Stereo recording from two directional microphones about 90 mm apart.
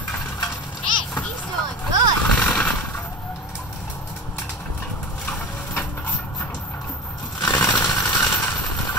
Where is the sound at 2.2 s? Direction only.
10° left (ahead or behind).